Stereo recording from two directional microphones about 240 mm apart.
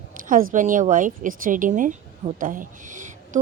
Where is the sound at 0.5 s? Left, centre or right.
Right.